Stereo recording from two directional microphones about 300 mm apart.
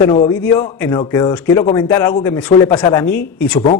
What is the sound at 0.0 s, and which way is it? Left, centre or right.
Speech, centre.